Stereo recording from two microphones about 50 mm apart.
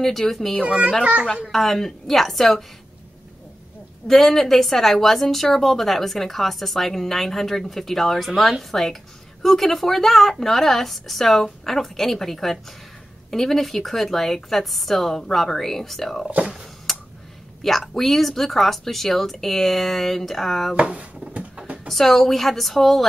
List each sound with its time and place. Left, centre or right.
0.0 s speech: centre
0.6 s a child's voice: right
1.2 s a woman's voice: centre
4.1 s a woman's voice: centre
16.3 s a child's voice: right
16.9 s tick: centre
17.6 s a woman's voice: centre
20.8 s speech: right
21.8 s a woman's voice: centre